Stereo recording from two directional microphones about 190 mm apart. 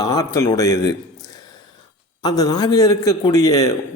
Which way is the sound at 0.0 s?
20° left (ahead or behind).